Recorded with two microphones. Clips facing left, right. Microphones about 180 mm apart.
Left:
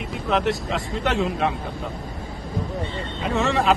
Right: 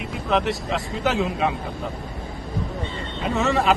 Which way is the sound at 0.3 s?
Centre (ahead or behind).